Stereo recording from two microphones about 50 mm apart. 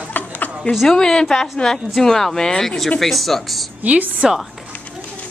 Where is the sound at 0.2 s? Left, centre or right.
Left.